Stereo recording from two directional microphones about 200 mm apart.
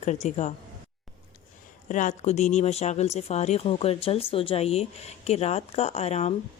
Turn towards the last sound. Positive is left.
turn(degrees=30)  # may be behind; listen again after turning